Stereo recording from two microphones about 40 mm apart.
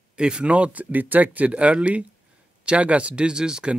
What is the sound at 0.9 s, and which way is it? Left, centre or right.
Speech, right.